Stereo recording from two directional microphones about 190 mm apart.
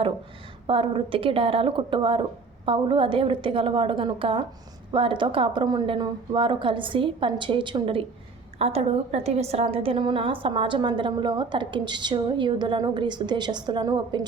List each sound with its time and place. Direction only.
0.7 s a woman's voice: 30° right (ahead or behind)